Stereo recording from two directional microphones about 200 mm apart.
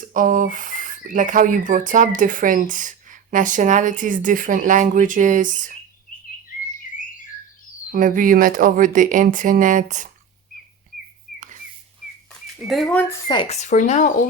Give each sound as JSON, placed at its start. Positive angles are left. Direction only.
{"t": 0.0, "sound": "speech", "side_deg": -40}
{"t": 7.9, "sound": "speech", "side_deg": -40}
{"t": 11.3, "sound": "a sound", "side_deg": -40}
{"t": 12.5, "sound": "speech", "side_deg": 0}
{"t": 13.2, "sound": "speech", "side_deg": 25}